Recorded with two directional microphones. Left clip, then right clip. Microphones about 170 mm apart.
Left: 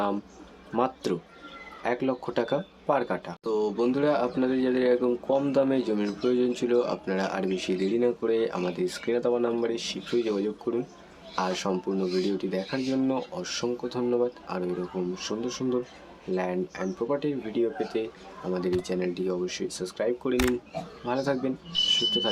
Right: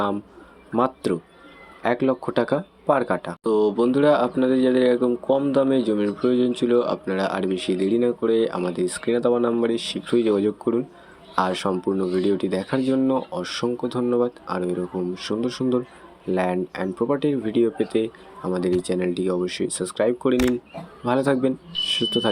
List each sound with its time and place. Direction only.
1.0 s speech: 15° right (ahead or behind)
20.3 s speech: centre (ahead or behind)
21.0 s speech: 25° right (ahead or behind)